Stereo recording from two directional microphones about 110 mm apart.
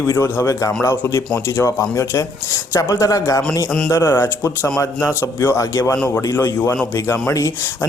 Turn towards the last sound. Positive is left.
turn(degrees=25)  # may be behind; listen again after turning